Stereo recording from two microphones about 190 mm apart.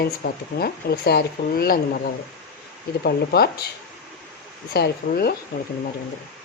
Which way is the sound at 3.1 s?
55° left (ahead or behind).